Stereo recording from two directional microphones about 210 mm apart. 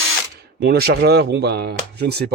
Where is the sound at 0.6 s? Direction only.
50° right (ahead or behind).